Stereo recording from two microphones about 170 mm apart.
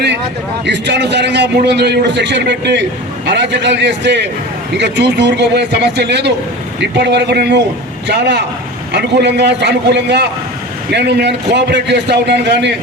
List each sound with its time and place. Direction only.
0.6 s a man's voice: 90° right